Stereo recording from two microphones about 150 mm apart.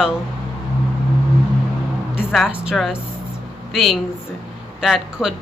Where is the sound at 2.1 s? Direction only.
5° right (ahead or behind).